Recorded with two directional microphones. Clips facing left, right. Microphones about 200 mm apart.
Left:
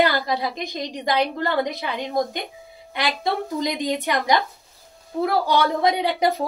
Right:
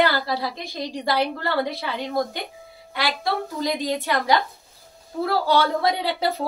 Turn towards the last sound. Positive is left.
turn(degrees=15)  # may be behind; listen again after turning